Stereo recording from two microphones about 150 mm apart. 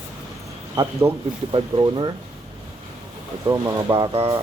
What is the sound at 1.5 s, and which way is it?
Speech, 30° right (ahead or behind).